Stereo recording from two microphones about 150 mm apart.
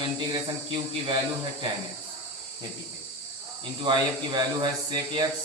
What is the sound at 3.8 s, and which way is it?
Speech, 30° right (ahead or behind).